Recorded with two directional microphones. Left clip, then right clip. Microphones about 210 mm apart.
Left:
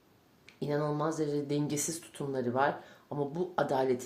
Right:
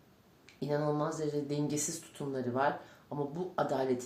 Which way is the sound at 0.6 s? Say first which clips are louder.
Left 1 dB; 40° left (ahead or behind).